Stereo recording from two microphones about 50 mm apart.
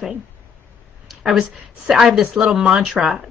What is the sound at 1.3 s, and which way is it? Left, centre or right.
A woman's voice, centre.